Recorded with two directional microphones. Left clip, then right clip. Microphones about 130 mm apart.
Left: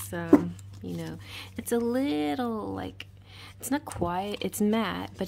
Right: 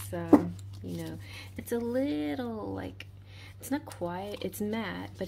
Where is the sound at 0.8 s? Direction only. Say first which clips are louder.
Left 2 dB; 45° left (ahead or behind).